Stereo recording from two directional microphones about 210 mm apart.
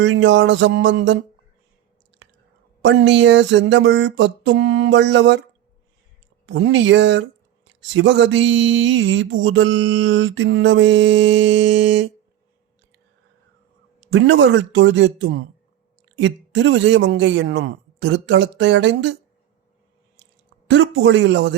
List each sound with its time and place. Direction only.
0.0 s speech: 65° right (ahead or behind)
2.8 s speech: 60° right (ahead or behind)
6.4 s speech: 65° right (ahead or behind)
14.1 s speech: 60° right (ahead or behind)
20.7 s speech: 65° right (ahead or behind)